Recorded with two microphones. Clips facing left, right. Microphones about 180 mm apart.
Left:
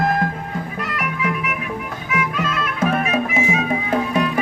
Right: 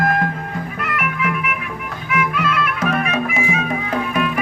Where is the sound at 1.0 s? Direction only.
35° left (ahead or behind).